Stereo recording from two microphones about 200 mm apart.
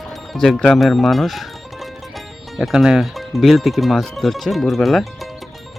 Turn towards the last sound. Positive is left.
turn(degrees=0)  # may be behind; listen again after turning